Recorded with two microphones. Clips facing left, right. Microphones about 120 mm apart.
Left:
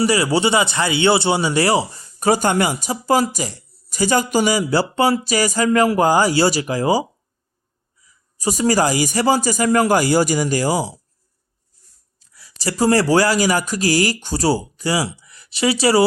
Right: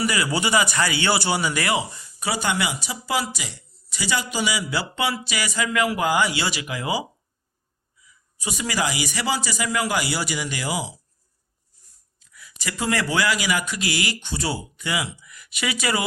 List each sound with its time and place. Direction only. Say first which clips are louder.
0.0 s a man's voice: left 7 dB; 30° left (ahead or behind)
8.0 s a man's voice: left 10 dB; 40° left (ahead or behind)
12.2 s speech: left 8 dB; 35° left (ahead or behind)